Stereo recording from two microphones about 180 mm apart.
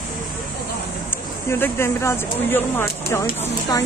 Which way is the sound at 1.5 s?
10° left (ahead or behind).